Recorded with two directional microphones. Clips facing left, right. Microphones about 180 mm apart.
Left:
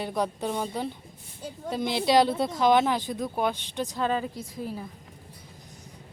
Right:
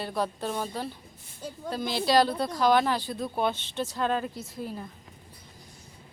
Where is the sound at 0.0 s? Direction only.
20° left (ahead or behind).